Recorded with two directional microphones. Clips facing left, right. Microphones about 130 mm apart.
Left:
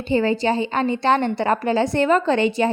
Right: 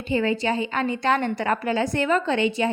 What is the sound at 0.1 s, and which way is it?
A woman's voice, 30° left (ahead or behind).